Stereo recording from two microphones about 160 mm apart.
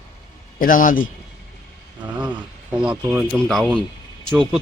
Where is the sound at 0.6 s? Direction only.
60° left (ahead or behind).